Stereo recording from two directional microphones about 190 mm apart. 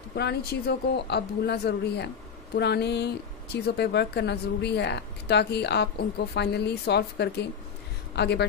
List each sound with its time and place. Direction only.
0.1 s speech: 60° left (ahead or behind)